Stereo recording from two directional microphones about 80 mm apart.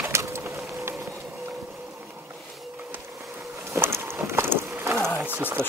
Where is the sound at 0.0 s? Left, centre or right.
Right.